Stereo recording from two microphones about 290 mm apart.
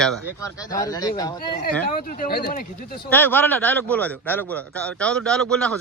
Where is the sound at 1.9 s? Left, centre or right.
Left.